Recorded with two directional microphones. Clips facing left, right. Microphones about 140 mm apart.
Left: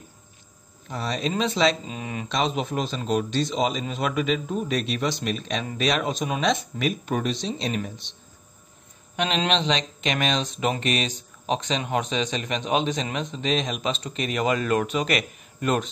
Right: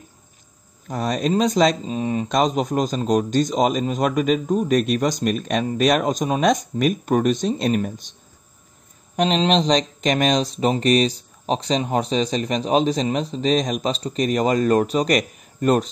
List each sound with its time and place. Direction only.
0.8 s speech: 45° right (ahead or behind)